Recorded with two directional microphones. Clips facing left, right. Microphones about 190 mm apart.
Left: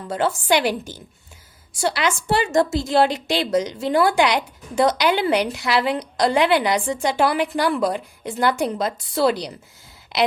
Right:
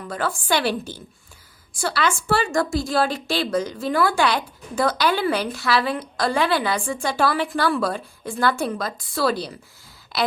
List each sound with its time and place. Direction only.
0.1 s a woman's voice: 20° left (ahead or behind)